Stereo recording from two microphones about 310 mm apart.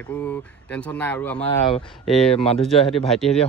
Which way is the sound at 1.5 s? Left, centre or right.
Centre.